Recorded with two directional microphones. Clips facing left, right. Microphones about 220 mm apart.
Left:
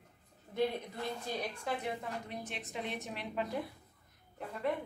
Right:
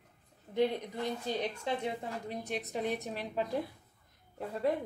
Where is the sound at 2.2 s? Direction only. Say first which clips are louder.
Right 6 dB; 40° right (ahead or behind).